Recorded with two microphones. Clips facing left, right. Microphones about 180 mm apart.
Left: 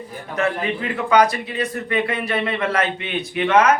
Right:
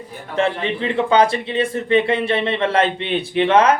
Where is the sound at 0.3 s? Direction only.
30° right (ahead or behind).